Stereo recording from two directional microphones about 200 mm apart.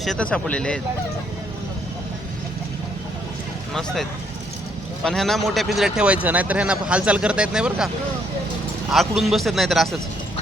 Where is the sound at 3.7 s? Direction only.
Centre (ahead or behind).